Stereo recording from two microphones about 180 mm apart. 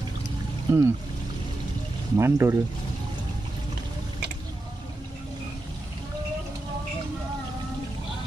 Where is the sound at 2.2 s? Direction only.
15° right (ahead or behind).